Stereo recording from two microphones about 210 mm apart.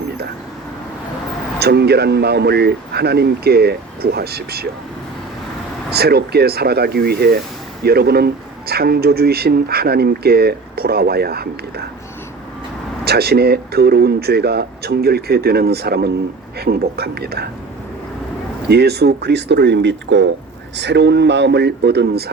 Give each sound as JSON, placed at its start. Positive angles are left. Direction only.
{"t": 1.5, "sound": "speech", "side_deg": -50}
{"t": 5.9, "sound": "speech", "side_deg": -50}
{"t": 13.1, "sound": "speech", "side_deg": -50}
{"t": 18.7, "sound": "speech", "side_deg": -50}